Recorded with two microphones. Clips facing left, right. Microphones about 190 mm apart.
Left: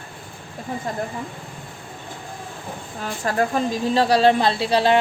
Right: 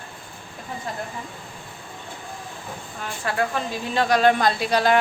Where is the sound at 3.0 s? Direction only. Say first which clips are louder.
Left 3 dB; 40° left (ahead or behind).